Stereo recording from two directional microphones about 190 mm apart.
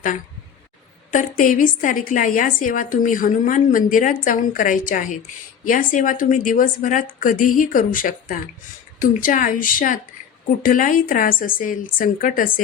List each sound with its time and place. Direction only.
1.1 s a woman's voice: 45° left (ahead or behind)